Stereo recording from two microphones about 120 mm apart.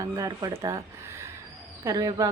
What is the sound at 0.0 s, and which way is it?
Speech, 30° right (ahead or behind).